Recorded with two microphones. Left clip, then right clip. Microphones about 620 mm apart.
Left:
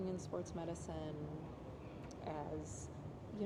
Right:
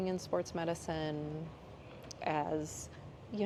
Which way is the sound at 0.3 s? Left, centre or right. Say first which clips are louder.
Right 9 dB; right.